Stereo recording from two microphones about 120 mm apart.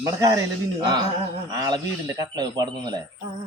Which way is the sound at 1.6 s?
35° right (ahead or behind).